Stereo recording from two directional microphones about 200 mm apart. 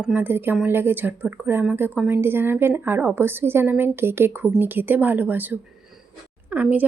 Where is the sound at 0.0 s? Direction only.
10° right (ahead or behind).